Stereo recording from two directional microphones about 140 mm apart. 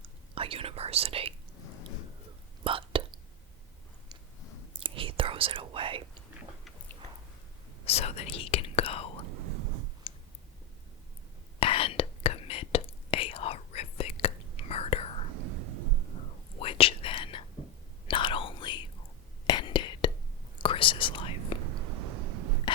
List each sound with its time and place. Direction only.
0.3 s speech: 40° right (ahead or behind)
2.6 s whispering: 40° right (ahead or behind)
4.8 s whispering: 40° right (ahead or behind)
7.9 s whispering: 50° left (ahead or behind)
10.0 s clicking: 40° left (ahead or behind)
11.6 s whispering: 40° left (ahead or behind)
16.6 s whispering: 40° left (ahead or behind)